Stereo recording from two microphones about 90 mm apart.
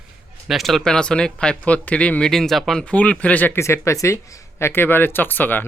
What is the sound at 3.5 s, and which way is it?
Speech, 30° left (ahead or behind).